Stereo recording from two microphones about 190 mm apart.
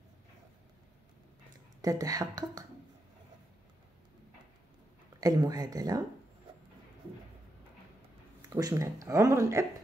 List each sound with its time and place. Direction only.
1.8 s speech: 20° right (ahead or behind)
5.2 s speech: 20° right (ahead or behind)
8.4 s speech: 20° right (ahead or behind)